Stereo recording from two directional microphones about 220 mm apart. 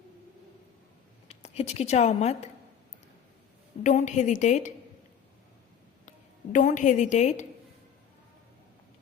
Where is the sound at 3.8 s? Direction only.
35° left (ahead or behind).